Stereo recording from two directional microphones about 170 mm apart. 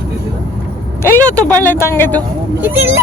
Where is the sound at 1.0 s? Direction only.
15° left (ahead or behind).